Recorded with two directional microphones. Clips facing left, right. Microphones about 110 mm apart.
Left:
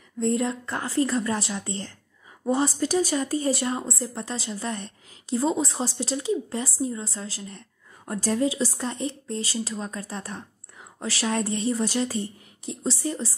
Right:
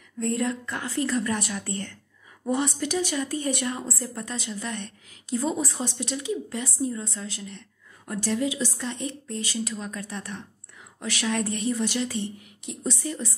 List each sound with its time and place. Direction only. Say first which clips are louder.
0.2 s a woman's voice: left 2 dB; 25° left (ahead or behind)